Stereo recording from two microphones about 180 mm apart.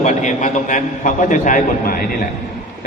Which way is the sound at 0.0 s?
40° left (ahead or behind).